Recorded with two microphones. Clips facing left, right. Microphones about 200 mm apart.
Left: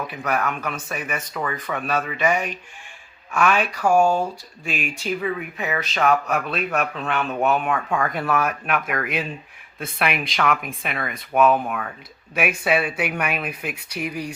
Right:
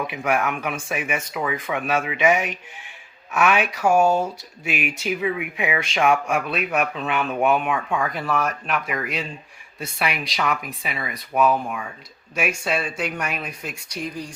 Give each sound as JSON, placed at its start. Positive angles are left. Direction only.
{"t": 0.1, "sound": "speech", "side_deg": -10}
{"t": 4.0, "sound": "speech", "side_deg": -20}
{"t": 4.6, "sound": "speech", "side_deg": -5}
{"t": 12.3, "sound": "speech", "side_deg": 55}
{"t": 12.8, "sound": "speech", "side_deg": 5}